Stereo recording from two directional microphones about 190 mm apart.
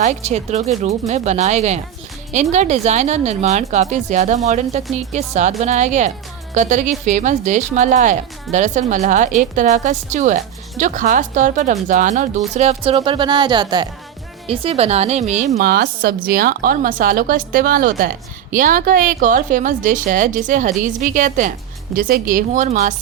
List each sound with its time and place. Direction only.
0.0 s a woman's voice: 35° right (ahead or behind)
15.7 s a woman's voice: 55° right (ahead or behind)